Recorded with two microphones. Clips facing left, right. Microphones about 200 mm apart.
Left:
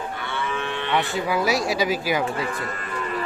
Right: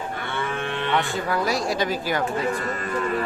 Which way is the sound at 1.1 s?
5° left (ahead or behind).